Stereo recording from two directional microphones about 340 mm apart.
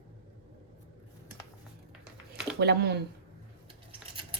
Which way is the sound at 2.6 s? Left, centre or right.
Right.